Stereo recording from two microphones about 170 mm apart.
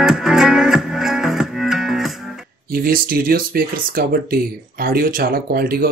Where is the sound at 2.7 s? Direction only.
60° right (ahead or behind).